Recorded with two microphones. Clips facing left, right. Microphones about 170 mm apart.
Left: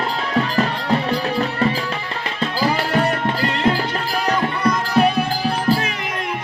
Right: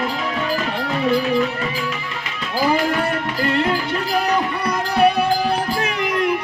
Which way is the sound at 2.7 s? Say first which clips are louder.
Even; 30° left (ahead or behind).